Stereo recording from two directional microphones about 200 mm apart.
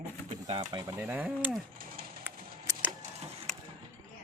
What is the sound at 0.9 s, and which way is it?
Speech, 5° right (ahead or behind).